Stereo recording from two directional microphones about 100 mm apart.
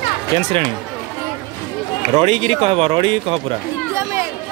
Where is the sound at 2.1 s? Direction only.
80° right.